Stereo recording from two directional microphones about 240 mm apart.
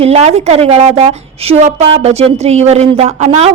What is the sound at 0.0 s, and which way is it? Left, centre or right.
A woman's voice, right.